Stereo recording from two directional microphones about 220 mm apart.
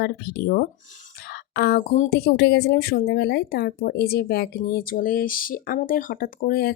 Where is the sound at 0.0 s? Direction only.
45° left (ahead or behind).